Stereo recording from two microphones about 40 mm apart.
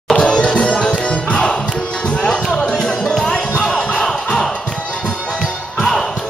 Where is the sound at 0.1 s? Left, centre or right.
Left.